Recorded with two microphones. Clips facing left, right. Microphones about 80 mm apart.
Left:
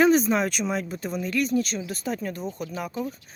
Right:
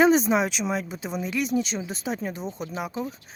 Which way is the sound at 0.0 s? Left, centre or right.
Centre.